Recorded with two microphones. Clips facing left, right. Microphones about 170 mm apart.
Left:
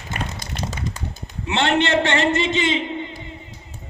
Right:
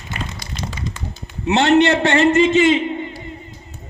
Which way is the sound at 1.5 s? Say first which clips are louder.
Right 6 dB; 40° right (ahead or behind).